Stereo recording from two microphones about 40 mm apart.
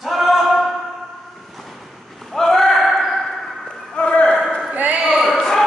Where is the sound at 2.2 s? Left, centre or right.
Centre.